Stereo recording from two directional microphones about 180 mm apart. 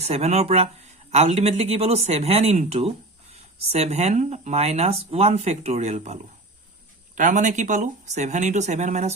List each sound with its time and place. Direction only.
0.0 s speech: 35° right (ahead or behind)
7.2 s speech: 45° right (ahead or behind)